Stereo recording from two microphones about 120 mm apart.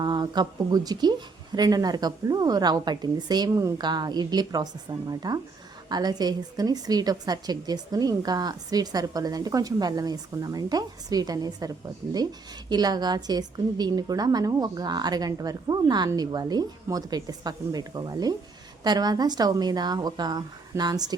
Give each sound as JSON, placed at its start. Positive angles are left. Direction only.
{"t": 0.0, "sound": "a woman's voice", "side_deg": -35}